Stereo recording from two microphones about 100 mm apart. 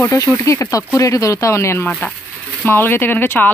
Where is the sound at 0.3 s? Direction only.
30° left (ahead or behind).